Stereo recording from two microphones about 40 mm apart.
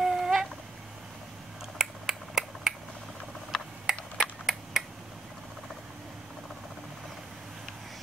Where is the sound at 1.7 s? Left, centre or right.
Centre.